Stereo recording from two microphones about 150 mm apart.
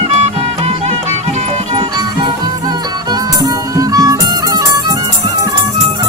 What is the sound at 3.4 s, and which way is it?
Music, 25° right (ahead or behind).